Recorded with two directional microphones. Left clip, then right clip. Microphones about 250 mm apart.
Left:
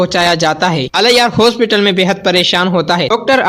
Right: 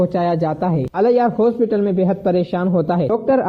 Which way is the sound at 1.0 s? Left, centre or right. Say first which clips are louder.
Left 5 dB; left.